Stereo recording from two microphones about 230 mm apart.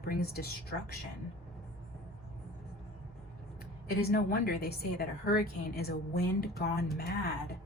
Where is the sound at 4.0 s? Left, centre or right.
Left.